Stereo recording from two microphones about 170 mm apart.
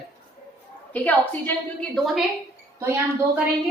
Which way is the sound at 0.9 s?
10° left (ahead or behind).